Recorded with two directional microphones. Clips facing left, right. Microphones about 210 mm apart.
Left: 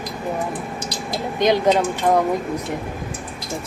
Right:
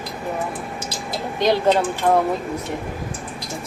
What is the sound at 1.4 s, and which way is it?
Speech, 15° left (ahead or behind).